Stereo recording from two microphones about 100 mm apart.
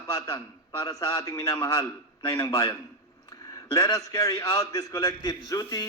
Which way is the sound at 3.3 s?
35° left (ahead or behind).